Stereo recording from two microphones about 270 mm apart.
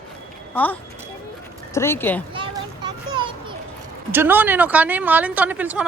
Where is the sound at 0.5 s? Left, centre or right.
Centre.